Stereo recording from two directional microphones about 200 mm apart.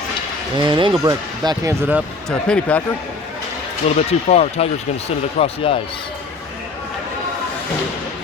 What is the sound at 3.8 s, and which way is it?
Speech, 30° left (ahead or behind).